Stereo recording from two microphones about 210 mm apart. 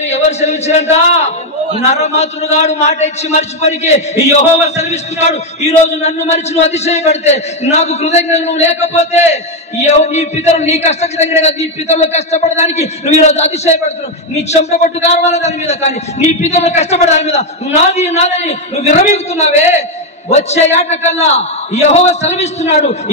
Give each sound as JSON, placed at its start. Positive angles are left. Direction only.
{"t": 0.0, "sound": "a man's voice", "side_deg": 30}